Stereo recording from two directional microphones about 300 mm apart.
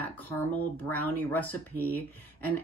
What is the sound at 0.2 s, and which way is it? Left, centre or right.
Speech, centre.